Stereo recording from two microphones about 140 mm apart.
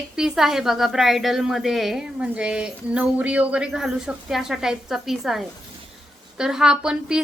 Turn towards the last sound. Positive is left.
turn(degrees=-5)  # may be behind; listen again after turning